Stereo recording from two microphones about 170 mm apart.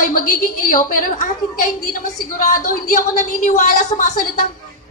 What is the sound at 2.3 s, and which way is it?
A woman's voice, 55° left (ahead or behind).